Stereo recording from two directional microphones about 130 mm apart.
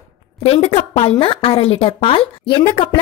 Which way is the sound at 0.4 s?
50° left (ahead or behind).